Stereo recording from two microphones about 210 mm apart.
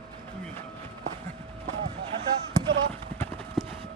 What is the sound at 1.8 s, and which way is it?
Speech, 25° right (ahead or behind).